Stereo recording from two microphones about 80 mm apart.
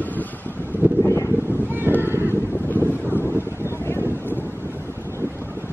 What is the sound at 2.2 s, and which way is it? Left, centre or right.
Wind noise, left.